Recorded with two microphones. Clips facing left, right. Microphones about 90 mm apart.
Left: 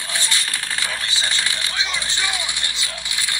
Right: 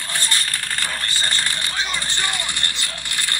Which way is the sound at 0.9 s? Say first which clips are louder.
Even; 50° right (ahead or behind).